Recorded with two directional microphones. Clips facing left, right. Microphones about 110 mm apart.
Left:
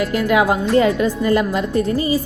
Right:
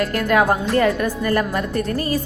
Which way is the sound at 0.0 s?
10° left (ahead or behind).